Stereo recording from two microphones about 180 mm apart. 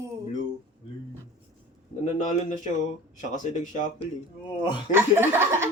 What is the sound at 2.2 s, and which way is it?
Speech, 45° left (ahead or behind).